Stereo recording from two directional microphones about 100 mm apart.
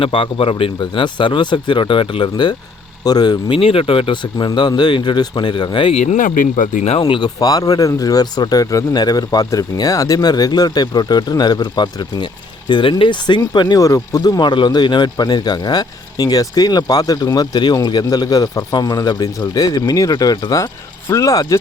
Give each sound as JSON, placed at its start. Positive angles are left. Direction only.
{"t": 0.0, "sound": "speech", "side_deg": 65}
{"t": 2.3, "sound": "speech", "side_deg": 45}
{"t": 3.5, "sound": "speech", "side_deg": 70}
{"t": 6.8, "sound": "speech", "side_deg": 80}
{"t": 7.2, "sound": "speech", "side_deg": 40}